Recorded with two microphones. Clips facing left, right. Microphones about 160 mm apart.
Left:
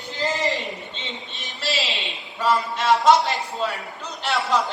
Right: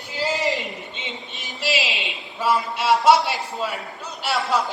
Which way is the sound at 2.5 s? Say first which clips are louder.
Even; 10° right (ahead or behind).